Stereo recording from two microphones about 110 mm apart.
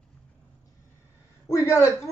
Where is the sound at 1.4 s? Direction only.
25° left (ahead or behind).